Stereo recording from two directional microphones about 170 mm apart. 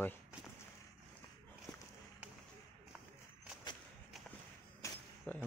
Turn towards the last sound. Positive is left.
turn(degrees=10)  # may be behind; listen again after turning